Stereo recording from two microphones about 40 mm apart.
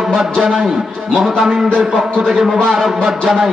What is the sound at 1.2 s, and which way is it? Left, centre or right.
A man's voice, centre.